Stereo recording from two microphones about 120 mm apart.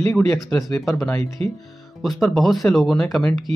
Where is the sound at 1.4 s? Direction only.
55° right (ahead or behind).